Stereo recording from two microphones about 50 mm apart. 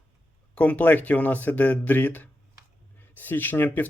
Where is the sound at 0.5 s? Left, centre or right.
Left.